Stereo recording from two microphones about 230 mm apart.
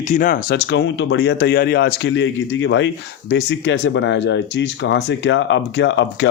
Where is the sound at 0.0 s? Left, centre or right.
Left.